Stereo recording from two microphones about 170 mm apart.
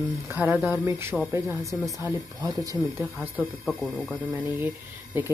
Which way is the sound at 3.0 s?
10° right (ahead or behind).